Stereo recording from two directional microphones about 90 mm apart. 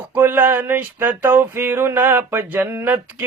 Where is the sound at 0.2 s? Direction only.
20° right (ahead or behind).